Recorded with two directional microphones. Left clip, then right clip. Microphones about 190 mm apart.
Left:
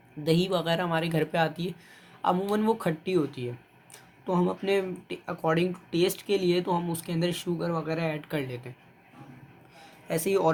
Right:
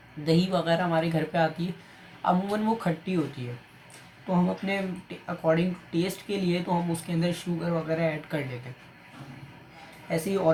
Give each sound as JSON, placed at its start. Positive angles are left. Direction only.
{"t": 0.3, "sound": "speech", "side_deg": 50}
{"t": 4.3, "sound": "speech", "side_deg": 50}
{"t": 10.1, "sound": "speech", "side_deg": 55}